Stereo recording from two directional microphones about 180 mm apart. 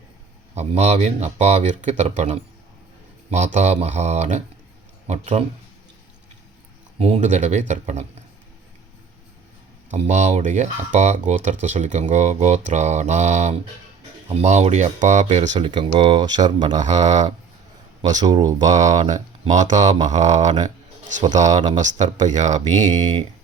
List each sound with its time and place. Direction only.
0.5 s speech: 35° right (ahead or behind)
7.0 s speech: 40° right (ahead or behind)
9.9 s speech: 40° right (ahead or behind)
15.5 s speech: 25° right (ahead or behind)
16.8 s speech: 40° right (ahead or behind)
18.2 s speech: 20° right (ahead or behind)
18.7 s speech: 40° right (ahead or behind)